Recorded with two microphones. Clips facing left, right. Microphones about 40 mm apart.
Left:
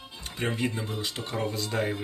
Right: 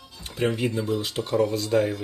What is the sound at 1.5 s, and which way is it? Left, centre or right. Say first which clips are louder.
Speech: right 7 dB; centre.